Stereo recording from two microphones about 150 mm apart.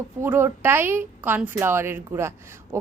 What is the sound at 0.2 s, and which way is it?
Speech, 15° right (ahead or behind).